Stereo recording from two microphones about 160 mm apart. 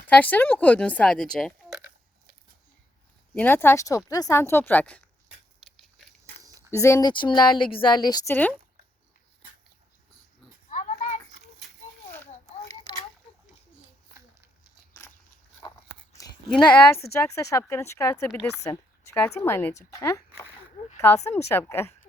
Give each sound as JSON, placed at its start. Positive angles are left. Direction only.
{"t": 0.1, "sound": "speech", "side_deg": 10}
{"t": 3.3, "sound": "speech", "side_deg": 10}
{"t": 5.6, "sound": "biting", "side_deg": 0}
{"t": 6.5, "sound": "a sound", "side_deg": 20}
{"t": 7.1, "sound": "speech", "side_deg": 30}
{"t": 10.7, "sound": "children playing", "side_deg": 50}
{"t": 12.6, "sound": "a sound", "side_deg": 25}
{"t": 16.5, "sound": "speech", "side_deg": 10}
{"t": 21.5, "sound": "speech", "side_deg": 15}